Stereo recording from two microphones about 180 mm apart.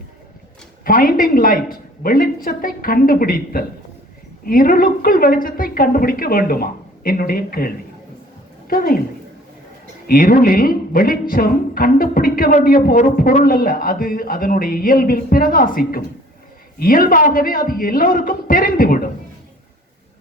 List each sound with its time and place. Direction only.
0.9 s a man's voice: 50° left (ahead or behind)
10.1 s a man's voice: 50° left (ahead or behind)